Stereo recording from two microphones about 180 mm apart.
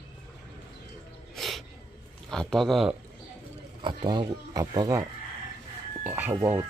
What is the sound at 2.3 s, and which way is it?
Speech, 5° left (ahead or behind).